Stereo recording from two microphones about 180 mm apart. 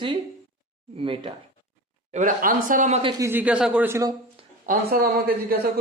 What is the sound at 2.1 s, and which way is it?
Speech, 45° right (ahead or behind).